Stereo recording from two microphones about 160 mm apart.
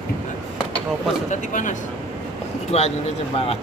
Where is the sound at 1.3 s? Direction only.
55° left (ahead or behind).